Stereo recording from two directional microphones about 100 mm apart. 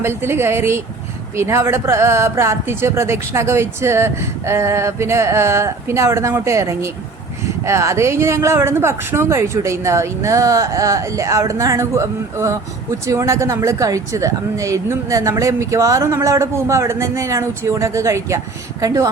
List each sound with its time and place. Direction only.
0.0 s speech: 25° right (ahead or behind)